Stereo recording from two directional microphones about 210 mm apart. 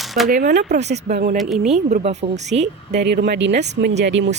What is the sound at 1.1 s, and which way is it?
Speech, 45° right (ahead or behind).